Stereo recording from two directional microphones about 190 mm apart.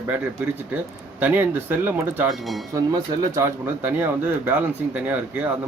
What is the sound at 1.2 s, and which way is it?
Speech, 10° right (ahead or behind).